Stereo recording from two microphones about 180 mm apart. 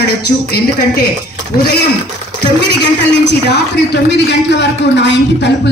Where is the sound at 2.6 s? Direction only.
70° left (ahead or behind).